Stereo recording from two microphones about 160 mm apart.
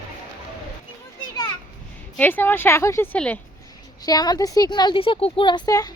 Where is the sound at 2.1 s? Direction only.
10° left (ahead or behind).